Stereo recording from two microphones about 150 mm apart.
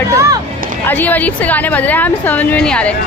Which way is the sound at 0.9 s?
10° left (ahead or behind).